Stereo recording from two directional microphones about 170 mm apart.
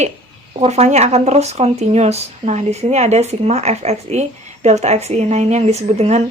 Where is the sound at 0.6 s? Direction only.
40° right (ahead or behind).